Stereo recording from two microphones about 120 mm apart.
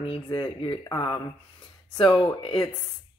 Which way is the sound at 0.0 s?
45° left (ahead or behind).